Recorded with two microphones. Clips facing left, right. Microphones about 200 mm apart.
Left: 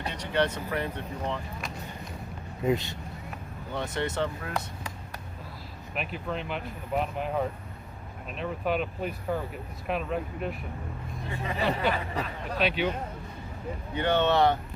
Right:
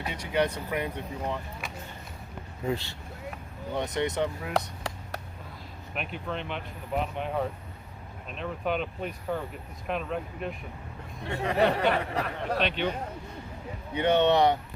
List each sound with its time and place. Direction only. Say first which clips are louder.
0.0 s speech: even; 10° right (ahead or behind)
2.6 s speech: left 4 dB; 20° left (ahead or behind)
3.8 s speech: right 2 dB; 20° right (ahead or behind)
4.5 s a sound: right 4 dB; 70° right (ahead or behind)
5.9 s speech: left 1 dB; centre (ahead or behind)
11.3 s speech: right 5 dB; 70° right (ahead or behind)
12.5 s speech: left 2 dB; 5° left (ahead or behind)
13.9 s speech: right 2 dB; 20° right (ahead or behind)